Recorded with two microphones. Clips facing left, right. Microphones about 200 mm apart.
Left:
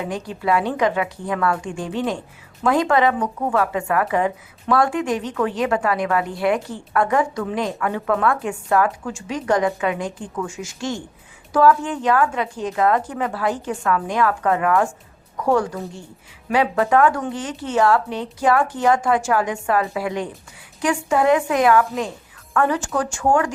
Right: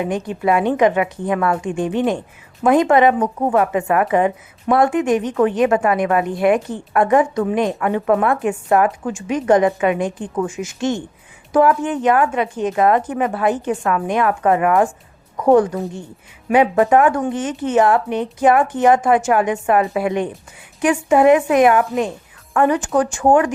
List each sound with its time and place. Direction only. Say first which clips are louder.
0.0 s speech: right 5 dB; 20° right (ahead or behind)